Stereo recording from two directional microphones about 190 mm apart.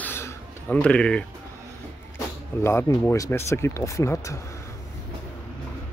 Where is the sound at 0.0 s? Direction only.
10° left (ahead or behind).